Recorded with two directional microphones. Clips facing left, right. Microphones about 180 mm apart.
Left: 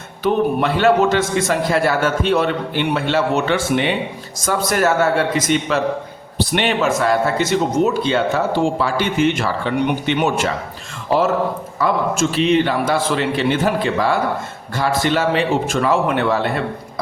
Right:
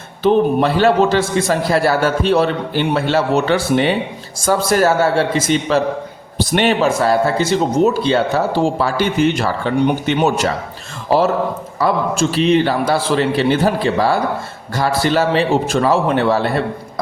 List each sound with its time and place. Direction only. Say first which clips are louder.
0.2 s a man's voice: right 4 dB; 30° right (ahead or behind)
11.8 s a man's voice: right 1 dB; 35° right (ahead or behind)